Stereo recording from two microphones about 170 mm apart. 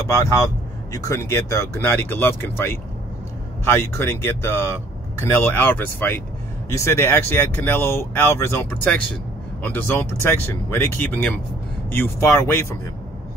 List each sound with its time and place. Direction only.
0.9 s speech: 20° left (ahead or behind)